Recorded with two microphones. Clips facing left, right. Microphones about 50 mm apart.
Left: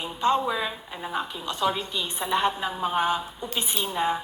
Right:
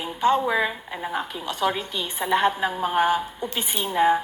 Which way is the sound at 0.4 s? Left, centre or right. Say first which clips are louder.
Right 5 dB; right.